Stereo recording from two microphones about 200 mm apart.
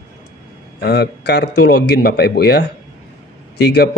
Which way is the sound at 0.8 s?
55° left (ahead or behind).